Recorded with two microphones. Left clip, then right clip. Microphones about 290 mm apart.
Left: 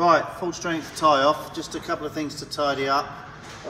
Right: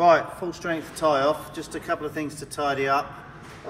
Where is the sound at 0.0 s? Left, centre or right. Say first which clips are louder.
Right 1 dB; centre.